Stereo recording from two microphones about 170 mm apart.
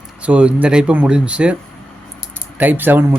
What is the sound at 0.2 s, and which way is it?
Speech, 5° right (ahead or behind).